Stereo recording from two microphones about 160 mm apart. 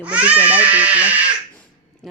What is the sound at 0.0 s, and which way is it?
A woman's voice, 10° right (ahead or behind).